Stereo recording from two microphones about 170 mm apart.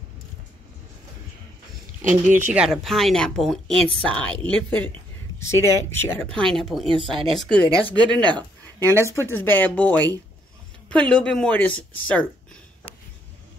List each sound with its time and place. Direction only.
2.0 s speech: 50° right (ahead or behind)
2.3 s a woman's voice: 10° right (ahead or behind)
7.1 s speech: 30° right (ahead or behind)
7.3 s a woman's voice: 5° left (ahead or behind)
8.4 s speech: 20° right (ahead or behind)
9.3 s a woman's voice: 10° left (ahead or behind)